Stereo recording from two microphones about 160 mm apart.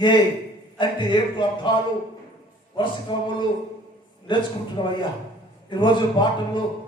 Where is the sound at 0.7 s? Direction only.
30° left (ahead or behind).